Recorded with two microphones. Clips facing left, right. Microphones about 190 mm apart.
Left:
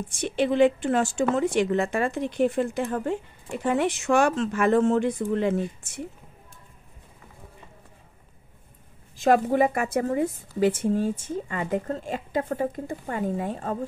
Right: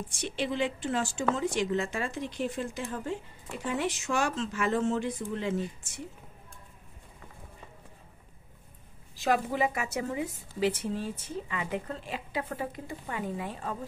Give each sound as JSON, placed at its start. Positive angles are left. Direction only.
{"t": 0.2, "sound": "speech", "side_deg": 55}
{"t": 9.1, "sound": "a woman's voice", "side_deg": 50}